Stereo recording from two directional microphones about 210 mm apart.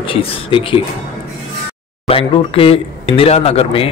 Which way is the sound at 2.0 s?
25° left (ahead or behind).